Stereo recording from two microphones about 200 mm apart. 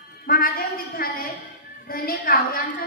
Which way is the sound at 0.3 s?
45° left (ahead or behind).